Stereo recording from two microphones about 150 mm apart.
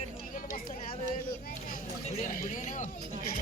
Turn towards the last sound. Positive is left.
turn(degrees=55)  # may be behind; listen again after turning